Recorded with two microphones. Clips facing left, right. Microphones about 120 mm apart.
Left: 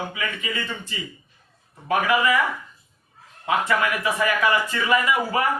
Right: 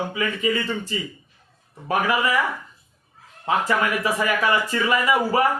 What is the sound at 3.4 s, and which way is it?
Speech, 35° right (ahead or behind).